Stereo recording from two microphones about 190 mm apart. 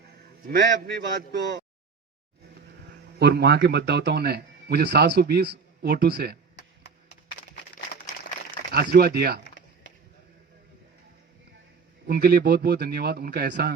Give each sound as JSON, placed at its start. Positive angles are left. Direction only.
{"t": 0.4, "sound": "a man's voice", "side_deg": -60}
{"t": 3.2, "sound": "a man's voice", "side_deg": -60}
{"t": 6.6, "sound": "a sound", "side_deg": 60}
{"t": 8.7, "sound": "a man's voice", "side_deg": -55}
{"t": 12.0, "sound": "a man's voice", "side_deg": -55}